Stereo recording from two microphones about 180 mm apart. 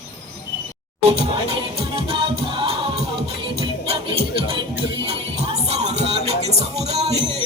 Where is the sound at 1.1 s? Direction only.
30° right (ahead or behind).